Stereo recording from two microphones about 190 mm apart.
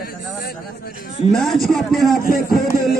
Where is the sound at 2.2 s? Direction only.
45° left (ahead or behind).